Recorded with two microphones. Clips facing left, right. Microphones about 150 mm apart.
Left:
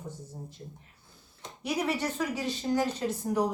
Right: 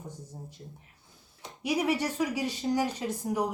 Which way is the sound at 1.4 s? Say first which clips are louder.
Right 2 dB; 10° right (ahead or behind).